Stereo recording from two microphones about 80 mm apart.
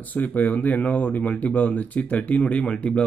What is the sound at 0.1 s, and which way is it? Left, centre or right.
Speech, centre.